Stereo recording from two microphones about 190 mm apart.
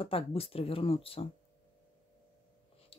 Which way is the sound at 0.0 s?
30° left (ahead or behind).